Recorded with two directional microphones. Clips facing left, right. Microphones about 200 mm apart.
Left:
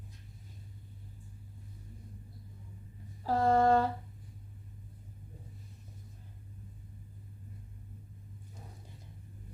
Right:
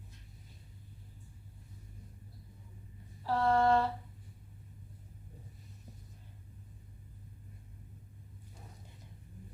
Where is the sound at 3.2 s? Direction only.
40° left (ahead or behind).